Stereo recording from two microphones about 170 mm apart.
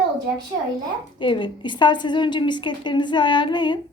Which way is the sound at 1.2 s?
30° left (ahead or behind).